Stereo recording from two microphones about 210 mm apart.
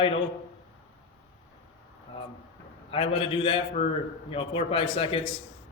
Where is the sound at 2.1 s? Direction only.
30° left (ahead or behind).